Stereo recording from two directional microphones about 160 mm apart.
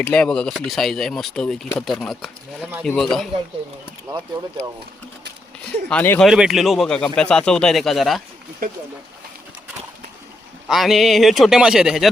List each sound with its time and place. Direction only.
0.0 s speech: 5° left (ahead or behind)
4.1 s speech: 20° right (ahead or behind)
5.9 s speech: 10° left (ahead or behind)
6.2 s speech: 5° right (ahead or behind)
8.6 s speech: 65° right (ahead or behind)
10.7 s speech: centre (ahead or behind)